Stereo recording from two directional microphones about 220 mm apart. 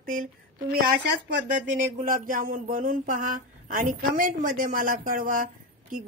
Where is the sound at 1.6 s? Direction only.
40° right (ahead or behind).